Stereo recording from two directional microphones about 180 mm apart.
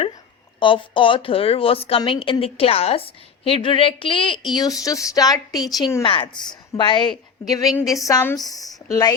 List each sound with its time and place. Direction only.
0.6 s a woman's voice: 25° left (ahead or behind)